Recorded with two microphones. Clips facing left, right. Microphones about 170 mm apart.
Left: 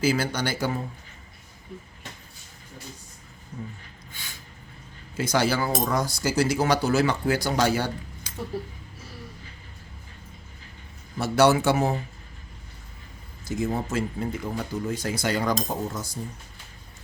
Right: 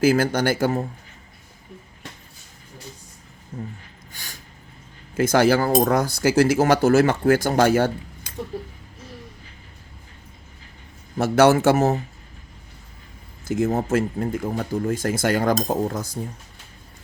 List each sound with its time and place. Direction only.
0.0 s speech: 50° right (ahead or behind)
4.1 s a sound: 45° right (ahead or behind)
5.1 s speech: 50° right (ahead or behind)
11.2 s speech: 50° right (ahead or behind)
13.4 s speech: 55° right (ahead or behind)